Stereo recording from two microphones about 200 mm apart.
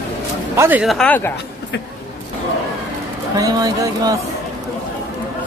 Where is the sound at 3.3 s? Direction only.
20° right (ahead or behind).